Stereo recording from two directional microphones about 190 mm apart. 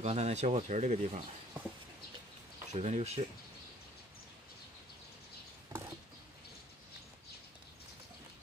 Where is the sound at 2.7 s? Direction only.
35° right (ahead or behind).